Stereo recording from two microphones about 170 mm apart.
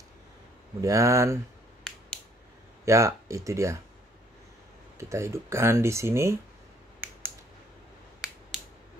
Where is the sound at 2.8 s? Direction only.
15° right (ahead or behind).